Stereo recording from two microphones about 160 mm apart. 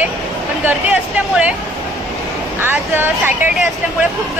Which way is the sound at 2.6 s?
15° right (ahead or behind).